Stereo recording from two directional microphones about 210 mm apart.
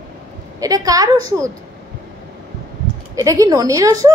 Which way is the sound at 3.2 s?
15° right (ahead or behind).